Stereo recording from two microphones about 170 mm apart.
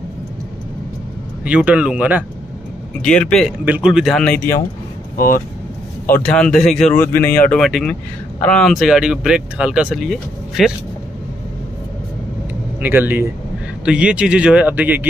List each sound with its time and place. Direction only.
1.4 s speech: 5° right (ahead or behind)
3.0 s speech: 5° left (ahead or behind)
3.6 s speech: 5° right (ahead or behind)
5.1 s speech: 55° left (ahead or behind)
6.1 s speech: 5° left (ahead or behind)
7.0 s speech: 15° left (ahead or behind)
12.8 s speech: 10° right (ahead or behind)